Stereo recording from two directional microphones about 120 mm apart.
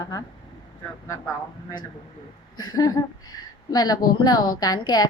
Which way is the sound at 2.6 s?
30° left (ahead or behind).